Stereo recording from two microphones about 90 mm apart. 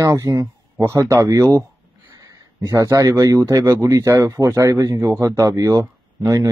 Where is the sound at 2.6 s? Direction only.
30° right (ahead or behind).